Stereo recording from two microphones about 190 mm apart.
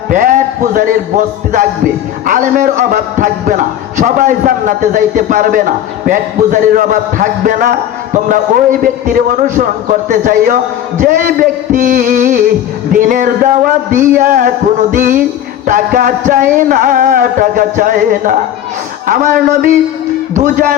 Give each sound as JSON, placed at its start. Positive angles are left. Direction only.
{"t": 0.1, "sound": "a man's voice", "side_deg": -45}
{"t": 2.2, "sound": "a man's voice", "side_deg": -45}